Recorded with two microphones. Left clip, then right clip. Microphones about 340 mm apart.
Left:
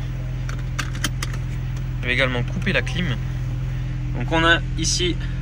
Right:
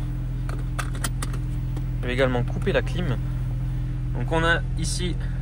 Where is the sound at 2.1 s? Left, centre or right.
Centre.